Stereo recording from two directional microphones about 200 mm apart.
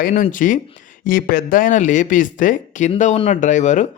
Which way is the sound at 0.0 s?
40° left (ahead or behind).